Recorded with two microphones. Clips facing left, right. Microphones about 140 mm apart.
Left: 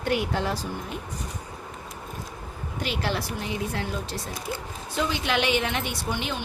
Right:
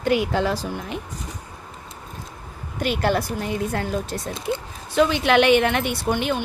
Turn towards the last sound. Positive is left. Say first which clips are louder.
# right 7 dB
turn(degrees=-55)  # may be behind; listen again after turning